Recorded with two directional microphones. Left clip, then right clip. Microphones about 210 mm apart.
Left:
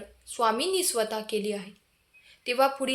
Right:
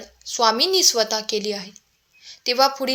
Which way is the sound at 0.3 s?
25° right (ahead or behind).